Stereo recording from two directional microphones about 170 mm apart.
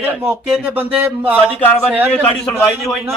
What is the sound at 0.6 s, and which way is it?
Speech, 10° right (ahead or behind).